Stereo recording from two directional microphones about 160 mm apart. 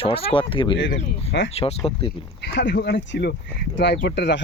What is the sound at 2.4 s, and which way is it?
Speech, 90° left.